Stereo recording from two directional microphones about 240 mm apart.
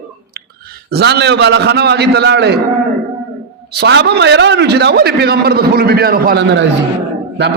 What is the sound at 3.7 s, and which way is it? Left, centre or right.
A man's voice, right.